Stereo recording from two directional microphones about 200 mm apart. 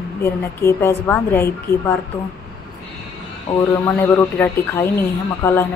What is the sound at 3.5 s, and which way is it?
Speech, 30° left (ahead or behind).